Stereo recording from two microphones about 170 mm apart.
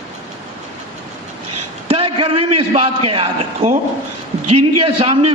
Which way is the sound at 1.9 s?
35° right (ahead or behind).